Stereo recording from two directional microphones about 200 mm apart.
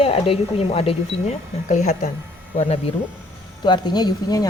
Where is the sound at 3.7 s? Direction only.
20° left (ahead or behind).